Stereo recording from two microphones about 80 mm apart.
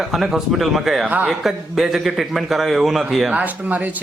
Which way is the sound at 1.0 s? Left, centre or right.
Centre.